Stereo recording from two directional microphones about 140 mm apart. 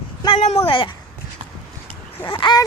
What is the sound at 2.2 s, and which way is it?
Speech, 35° left (ahead or behind).